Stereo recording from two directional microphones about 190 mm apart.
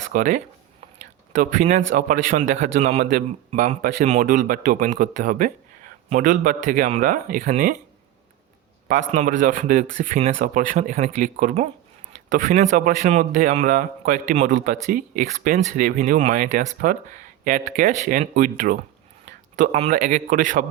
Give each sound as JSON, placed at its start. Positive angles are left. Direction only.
{"t": 0.1, "sound": "a man's voice", "side_deg": -45}
{"t": 3.1, "sound": "speech", "side_deg": -50}
{"t": 8.9, "sound": "a man's voice", "side_deg": -40}